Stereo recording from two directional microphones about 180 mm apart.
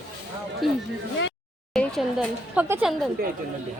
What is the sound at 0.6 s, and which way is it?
A woman's voice, centre (ahead or behind).